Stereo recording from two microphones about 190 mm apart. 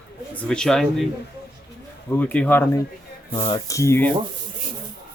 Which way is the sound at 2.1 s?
10° left (ahead or behind).